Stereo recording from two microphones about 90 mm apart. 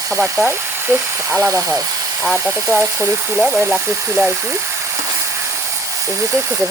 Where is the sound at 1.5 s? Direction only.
30° right (ahead or behind).